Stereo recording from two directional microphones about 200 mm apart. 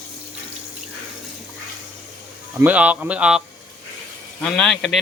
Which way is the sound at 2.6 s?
5° right (ahead or behind).